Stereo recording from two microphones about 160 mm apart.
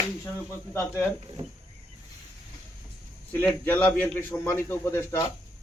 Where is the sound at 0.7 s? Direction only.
15° left (ahead or behind).